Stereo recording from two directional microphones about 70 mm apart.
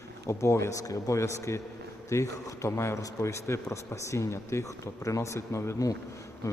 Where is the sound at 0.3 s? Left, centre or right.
Left.